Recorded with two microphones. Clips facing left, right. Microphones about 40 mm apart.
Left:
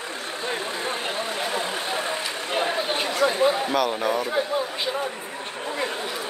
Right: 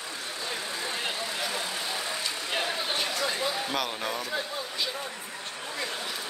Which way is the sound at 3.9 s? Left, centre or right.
Centre.